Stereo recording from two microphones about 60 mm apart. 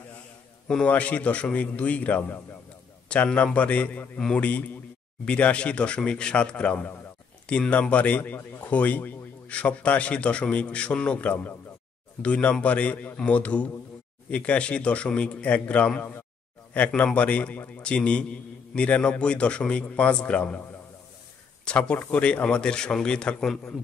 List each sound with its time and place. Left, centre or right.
0.8 s a man's voice: left
21.6 s a man's voice: centre